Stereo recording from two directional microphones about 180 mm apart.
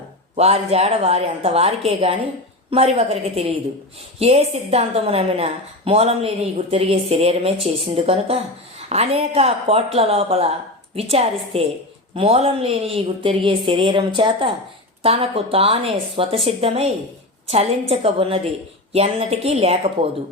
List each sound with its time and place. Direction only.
0.3 s a woman's voice: 35° right (ahead or behind)